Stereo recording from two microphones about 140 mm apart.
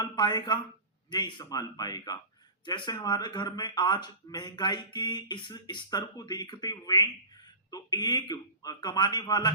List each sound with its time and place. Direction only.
0.0 s a man's voice: 30° left (ahead or behind)